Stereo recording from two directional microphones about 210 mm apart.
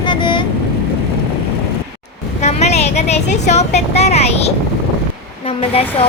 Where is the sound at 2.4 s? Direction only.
30° left (ahead or behind).